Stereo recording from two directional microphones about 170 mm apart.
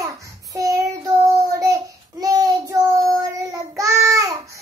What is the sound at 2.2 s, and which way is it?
Child singing, 20° right (ahead or behind).